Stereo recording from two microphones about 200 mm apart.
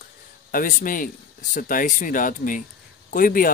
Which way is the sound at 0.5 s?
45° left (ahead or behind).